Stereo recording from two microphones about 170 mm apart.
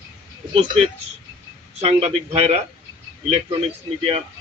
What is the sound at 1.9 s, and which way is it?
Speech, 35° right (ahead or behind).